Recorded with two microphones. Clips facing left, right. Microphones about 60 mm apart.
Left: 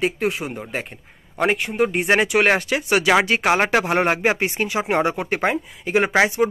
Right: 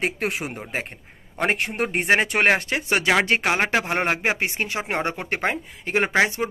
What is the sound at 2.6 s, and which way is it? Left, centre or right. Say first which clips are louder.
Speech: left 4 dB; right.